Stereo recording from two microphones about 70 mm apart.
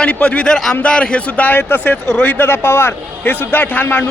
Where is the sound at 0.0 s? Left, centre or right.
Centre.